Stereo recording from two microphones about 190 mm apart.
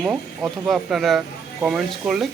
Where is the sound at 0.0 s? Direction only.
5° right (ahead or behind).